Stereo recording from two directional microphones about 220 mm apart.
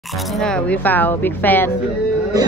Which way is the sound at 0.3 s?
5° left (ahead or behind).